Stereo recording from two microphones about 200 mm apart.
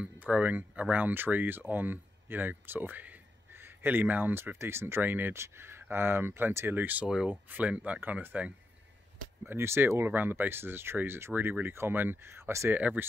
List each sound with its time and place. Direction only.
0.0 s speech: 10° right (ahead or behind)